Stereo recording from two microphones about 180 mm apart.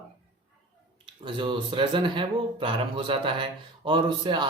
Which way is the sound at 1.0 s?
25° right (ahead or behind).